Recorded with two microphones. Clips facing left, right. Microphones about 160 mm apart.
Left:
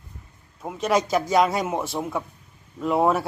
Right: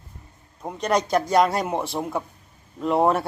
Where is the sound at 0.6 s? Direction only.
5° left (ahead or behind).